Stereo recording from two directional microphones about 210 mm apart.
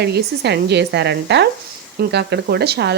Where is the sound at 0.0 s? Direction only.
50° right (ahead or behind).